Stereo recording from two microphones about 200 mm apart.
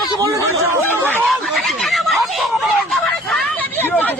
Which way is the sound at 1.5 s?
Centre (ahead or behind).